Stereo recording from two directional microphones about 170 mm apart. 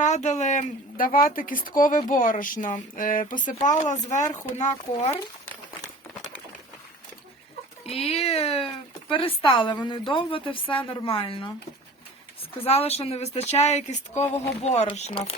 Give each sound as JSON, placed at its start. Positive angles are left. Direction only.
{"t": 0.0, "sound": "speech", "side_deg": 45}
{"t": 7.9, "sound": "speech", "side_deg": 35}
{"t": 12.5, "sound": "speech", "side_deg": 35}